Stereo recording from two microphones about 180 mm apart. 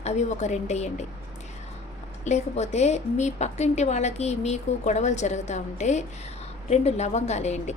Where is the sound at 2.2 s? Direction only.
40° left (ahead or behind).